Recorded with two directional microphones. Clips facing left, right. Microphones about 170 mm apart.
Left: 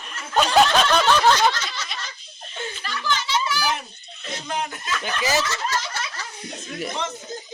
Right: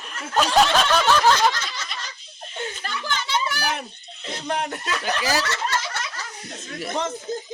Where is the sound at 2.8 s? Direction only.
50° right (ahead or behind); by 6.0 s 65° right (ahead or behind).